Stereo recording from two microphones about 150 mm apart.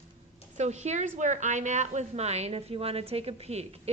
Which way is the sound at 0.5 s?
50° right (ahead or behind).